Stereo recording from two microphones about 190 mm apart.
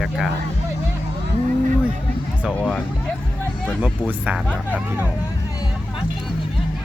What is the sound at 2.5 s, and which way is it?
Speech, 5° left (ahead or behind).